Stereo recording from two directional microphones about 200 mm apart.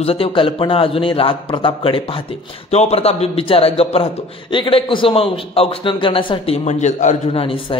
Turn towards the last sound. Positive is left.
turn(degrees=25)  # may be behind; listen again after turning